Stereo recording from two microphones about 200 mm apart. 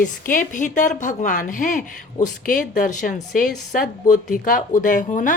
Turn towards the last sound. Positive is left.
turn(degrees=40)  # may be behind; listen again after turning